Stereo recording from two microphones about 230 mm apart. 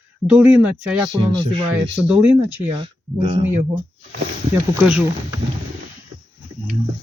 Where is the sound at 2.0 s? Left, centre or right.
Centre.